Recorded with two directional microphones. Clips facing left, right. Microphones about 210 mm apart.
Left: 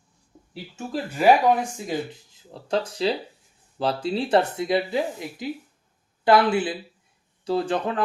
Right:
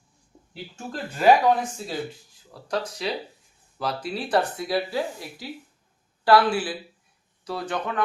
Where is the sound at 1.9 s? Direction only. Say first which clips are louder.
Left 3 dB; 20° left (ahead or behind).